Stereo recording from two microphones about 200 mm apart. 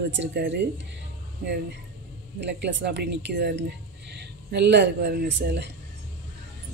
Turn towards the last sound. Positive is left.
turn(degrees=-55)  # may be behind; listen again after turning